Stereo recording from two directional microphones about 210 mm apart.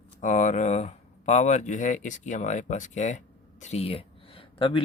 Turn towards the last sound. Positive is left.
turn(degrees=25)  # may be behind; listen again after turning